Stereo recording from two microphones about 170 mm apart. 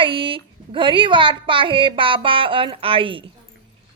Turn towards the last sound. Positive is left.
turn(degrees=-30)  # may be behind; listen again after turning